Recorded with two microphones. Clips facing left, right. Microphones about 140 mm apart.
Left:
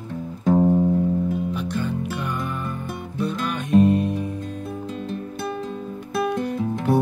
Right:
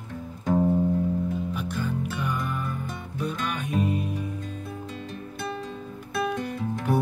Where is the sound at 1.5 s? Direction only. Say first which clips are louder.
Left 4 dB; 10° right (ahead or behind).